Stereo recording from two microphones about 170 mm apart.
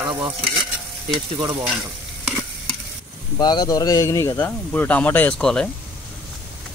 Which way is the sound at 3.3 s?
25° left (ahead or behind).